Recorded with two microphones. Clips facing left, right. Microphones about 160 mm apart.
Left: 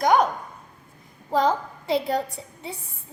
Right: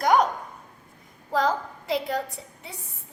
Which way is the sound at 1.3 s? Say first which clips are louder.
Left 3 dB; 25° left (ahead or behind).